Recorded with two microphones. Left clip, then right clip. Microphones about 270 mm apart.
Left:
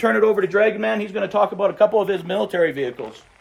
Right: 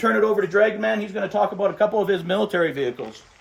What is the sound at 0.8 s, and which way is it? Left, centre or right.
A man's voice, centre.